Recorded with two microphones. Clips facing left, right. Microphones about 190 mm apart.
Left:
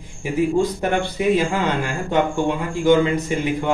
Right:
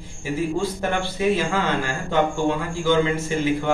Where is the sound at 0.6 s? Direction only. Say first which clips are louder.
Left 4 dB; 15° left (ahead or behind).